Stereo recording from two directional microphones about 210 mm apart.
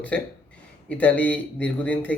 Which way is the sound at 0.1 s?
5° left (ahead or behind).